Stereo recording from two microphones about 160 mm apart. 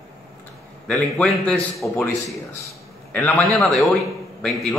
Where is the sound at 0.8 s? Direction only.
5° left (ahead or behind).